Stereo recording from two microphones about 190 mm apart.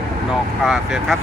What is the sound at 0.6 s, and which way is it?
Speech, centre (ahead or behind).